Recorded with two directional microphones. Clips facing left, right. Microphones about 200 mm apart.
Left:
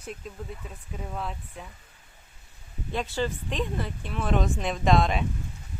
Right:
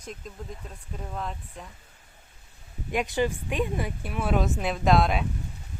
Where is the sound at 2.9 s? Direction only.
15° right (ahead or behind).